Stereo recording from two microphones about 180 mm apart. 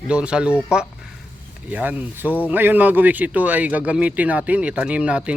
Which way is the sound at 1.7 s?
10° right (ahead or behind).